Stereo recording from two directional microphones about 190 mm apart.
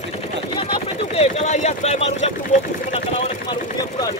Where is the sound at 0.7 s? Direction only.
35° left (ahead or behind).